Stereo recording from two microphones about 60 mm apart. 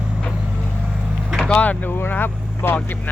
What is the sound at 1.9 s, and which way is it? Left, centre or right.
Vehicle, left.